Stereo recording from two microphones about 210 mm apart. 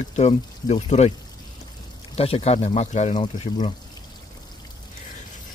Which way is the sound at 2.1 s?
30° left (ahead or behind).